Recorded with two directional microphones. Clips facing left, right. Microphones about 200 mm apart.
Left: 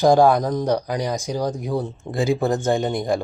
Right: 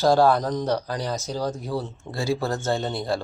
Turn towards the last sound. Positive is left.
turn(degrees=15)  # may be behind; listen again after turning